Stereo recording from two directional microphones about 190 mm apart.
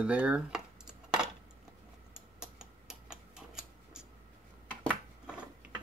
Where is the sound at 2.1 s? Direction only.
5° right (ahead or behind).